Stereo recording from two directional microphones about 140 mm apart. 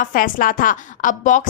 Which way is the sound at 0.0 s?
75° left (ahead or behind).